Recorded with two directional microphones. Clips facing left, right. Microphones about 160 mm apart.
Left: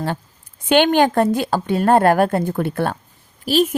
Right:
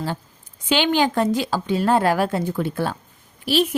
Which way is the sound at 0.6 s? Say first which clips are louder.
Left 5 dB; 55° left (ahead or behind).